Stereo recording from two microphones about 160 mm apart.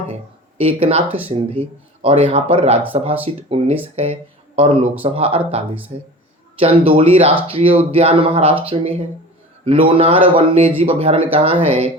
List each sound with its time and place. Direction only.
0.6 s speech: 35° right (ahead or behind)